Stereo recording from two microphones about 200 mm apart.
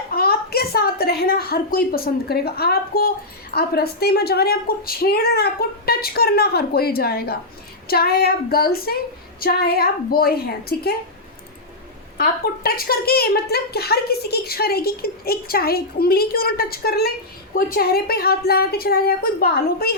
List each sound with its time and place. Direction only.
0.1 s a woman's voice: 50° left (ahead or behind)
12.1 s a woman's voice: 50° left (ahead or behind)